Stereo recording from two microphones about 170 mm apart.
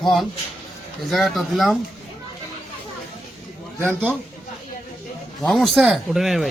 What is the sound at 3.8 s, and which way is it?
Speech, 10° right (ahead or behind).